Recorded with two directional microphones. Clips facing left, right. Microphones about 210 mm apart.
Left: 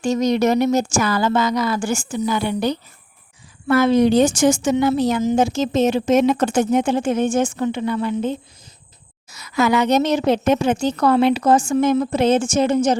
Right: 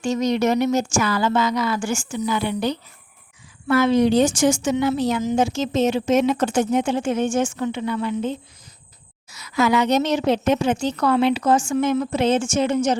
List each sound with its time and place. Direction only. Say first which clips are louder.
0.0 s a woman's voice: left 3 dB; 40° left (ahead or behind)